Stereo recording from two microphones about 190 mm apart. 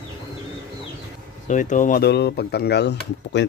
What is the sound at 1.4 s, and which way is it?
Speech, 40° left (ahead or behind).